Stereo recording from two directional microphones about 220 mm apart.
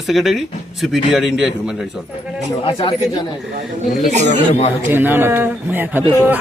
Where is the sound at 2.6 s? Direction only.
25° left (ahead or behind).